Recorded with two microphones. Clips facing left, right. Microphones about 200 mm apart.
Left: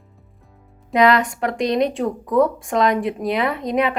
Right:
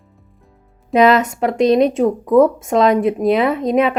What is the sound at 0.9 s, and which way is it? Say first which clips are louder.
Speech: right 4 dB; 20° right (ahead or behind).